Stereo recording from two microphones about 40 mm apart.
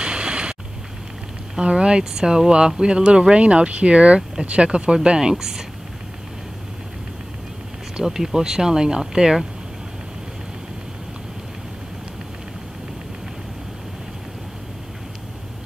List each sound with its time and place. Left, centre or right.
0.0 s a sound: right
1.6 s speech: right
7.9 s speech: centre